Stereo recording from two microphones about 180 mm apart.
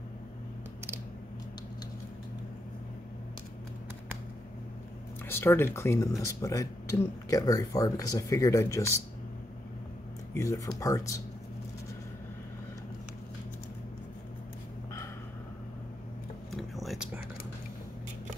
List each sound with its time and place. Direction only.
5.3 s speech: 10° left (ahead or behind)
10.3 s speech: 20° left (ahead or behind)
16.5 s a sound: centre (ahead or behind)